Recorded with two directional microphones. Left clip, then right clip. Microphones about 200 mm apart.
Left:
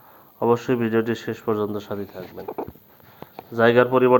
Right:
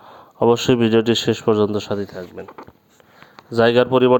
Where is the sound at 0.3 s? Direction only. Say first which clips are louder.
Right 5 dB; 50° right (ahead or behind).